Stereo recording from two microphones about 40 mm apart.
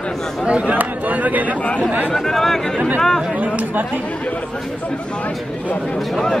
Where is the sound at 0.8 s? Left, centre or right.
Right.